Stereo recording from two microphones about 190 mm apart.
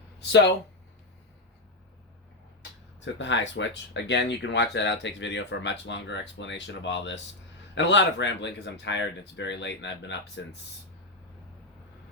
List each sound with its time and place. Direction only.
0.2 s speech: 65° left (ahead or behind)
3.0 s speech: 75° left (ahead or behind)